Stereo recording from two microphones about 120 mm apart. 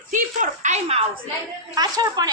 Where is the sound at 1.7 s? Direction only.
30° right (ahead or behind).